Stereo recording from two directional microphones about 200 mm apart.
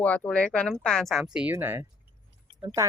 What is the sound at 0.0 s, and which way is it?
Speech, 5° left (ahead or behind).